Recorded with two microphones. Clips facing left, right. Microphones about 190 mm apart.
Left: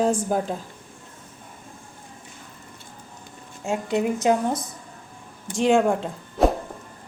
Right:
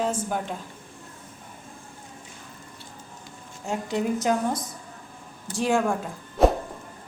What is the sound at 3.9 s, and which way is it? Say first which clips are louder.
Speech: left 3 dB; 20° left (ahead or behind).